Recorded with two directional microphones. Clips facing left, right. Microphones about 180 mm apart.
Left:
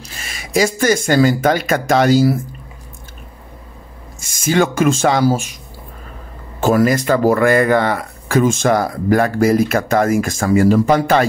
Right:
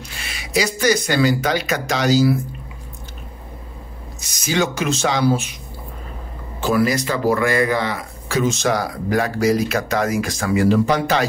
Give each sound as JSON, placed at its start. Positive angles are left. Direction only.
{"t": 0.1, "sound": "speech", "side_deg": 45}
{"t": 4.2, "sound": "speech", "side_deg": 50}
{"t": 6.6, "sound": "speech", "side_deg": 45}